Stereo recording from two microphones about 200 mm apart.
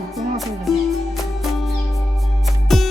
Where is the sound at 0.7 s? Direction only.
Centre (ahead or behind).